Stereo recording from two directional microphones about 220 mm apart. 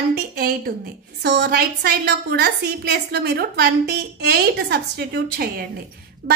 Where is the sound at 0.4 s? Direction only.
40° right (ahead or behind).